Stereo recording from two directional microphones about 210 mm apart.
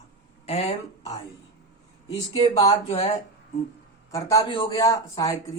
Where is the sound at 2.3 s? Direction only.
30° left (ahead or behind).